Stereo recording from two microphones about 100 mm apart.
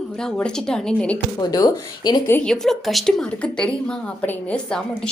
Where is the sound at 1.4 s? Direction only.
40° left (ahead or behind).